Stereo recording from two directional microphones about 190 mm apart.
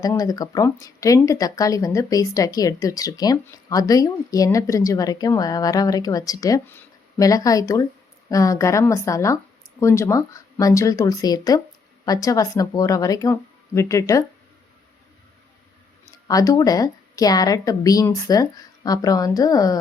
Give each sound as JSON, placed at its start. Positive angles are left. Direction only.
{"t": 0.0, "sound": "speech", "side_deg": 20}
{"t": 16.2, "sound": "speech", "side_deg": 20}